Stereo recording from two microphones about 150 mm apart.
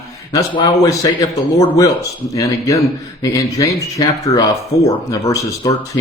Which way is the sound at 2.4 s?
20° left (ahead or behind).